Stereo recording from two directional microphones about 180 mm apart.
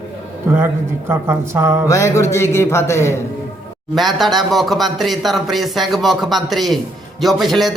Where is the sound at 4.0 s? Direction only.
Centre (ahead or behind).